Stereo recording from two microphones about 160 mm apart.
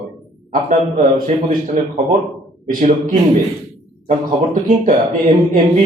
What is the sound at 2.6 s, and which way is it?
Speech, 55° right (ahead or behind).